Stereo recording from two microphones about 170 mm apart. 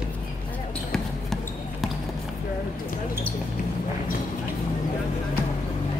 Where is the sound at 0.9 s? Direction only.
Centre (ahead or behind).